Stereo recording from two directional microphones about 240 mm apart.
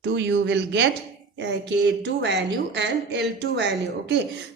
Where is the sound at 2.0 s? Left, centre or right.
Right.